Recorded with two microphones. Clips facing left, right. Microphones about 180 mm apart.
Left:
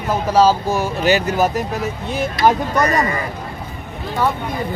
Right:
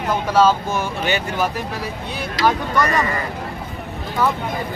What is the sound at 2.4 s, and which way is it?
Speech, 90° right.